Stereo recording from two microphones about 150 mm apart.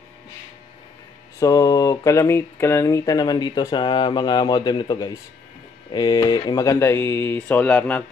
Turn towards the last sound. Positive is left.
turn(degrees=10)  # may be behind; listen again after turning